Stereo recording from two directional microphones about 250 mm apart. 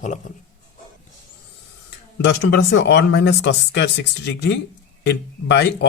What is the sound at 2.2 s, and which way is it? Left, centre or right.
Speech, left.